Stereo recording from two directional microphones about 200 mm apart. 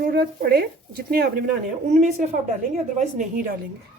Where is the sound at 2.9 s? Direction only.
40° right (ahead or behind).